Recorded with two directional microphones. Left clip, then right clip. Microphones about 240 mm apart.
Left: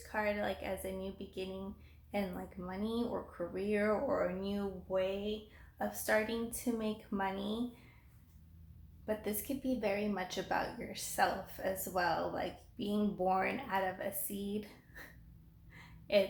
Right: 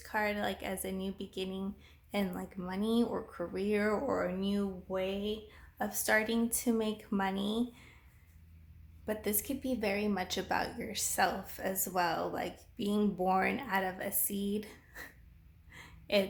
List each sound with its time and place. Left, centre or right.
0.1 s a woman's voice: right
9.0 s a woman's voice: right
15.7 s a sound: right